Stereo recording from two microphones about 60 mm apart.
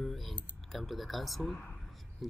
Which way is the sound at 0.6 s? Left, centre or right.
Centre.